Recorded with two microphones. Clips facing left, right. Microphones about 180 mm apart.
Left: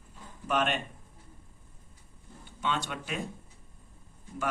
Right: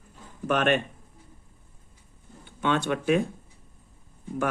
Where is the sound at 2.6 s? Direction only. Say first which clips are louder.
Right 9 dB; 60° right (ahead or behind).